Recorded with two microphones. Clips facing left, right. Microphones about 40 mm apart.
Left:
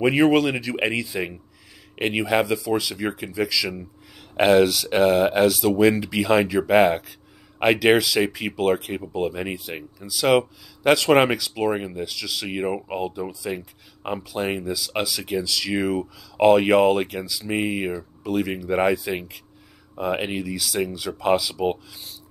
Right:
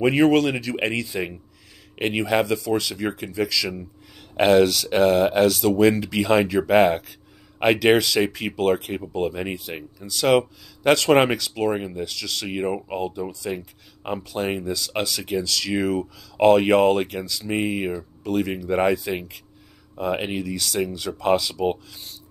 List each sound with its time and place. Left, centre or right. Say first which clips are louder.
0.0 s speech: even; centre